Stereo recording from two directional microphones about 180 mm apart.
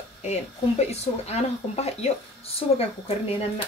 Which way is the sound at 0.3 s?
35° left (ahead or behind).